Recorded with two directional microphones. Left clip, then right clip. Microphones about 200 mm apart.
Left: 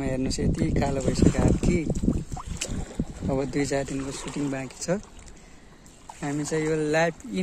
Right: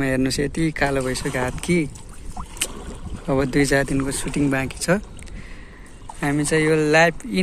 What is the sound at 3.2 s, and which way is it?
Speech, 5° left (ahead or behind).